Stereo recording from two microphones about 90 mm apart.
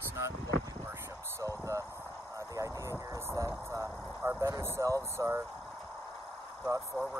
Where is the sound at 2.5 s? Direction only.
40° right (ahead or behind).